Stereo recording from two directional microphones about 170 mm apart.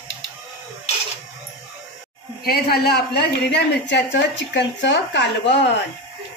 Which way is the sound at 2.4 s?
65° left (ahead or behind).